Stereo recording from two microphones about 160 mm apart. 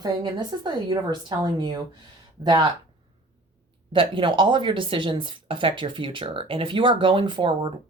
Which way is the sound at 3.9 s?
30° right (ahead or behind).